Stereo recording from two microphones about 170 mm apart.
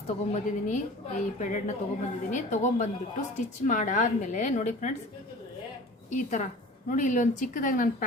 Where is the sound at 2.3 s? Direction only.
45° left (ahead or behind).